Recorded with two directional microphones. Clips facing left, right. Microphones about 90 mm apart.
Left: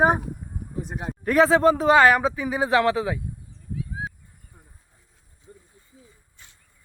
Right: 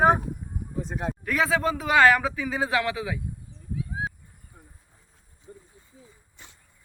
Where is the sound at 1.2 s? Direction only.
35° left (ahead or behind).